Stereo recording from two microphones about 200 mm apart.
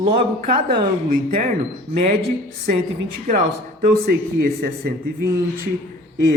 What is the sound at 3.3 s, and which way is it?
A man's voice, 45° right (ahead or behind).